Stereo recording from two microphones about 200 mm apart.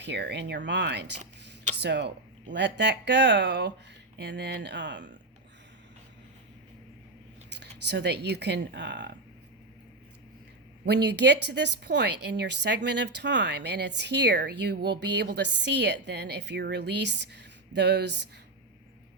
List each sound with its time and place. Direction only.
0.0 s a woman's voice: 60° right (ahead or behind)
7.5 s speech: 60° right (ahead or behind)
10.8 s a woman's voice: 60° right (ahead or behind)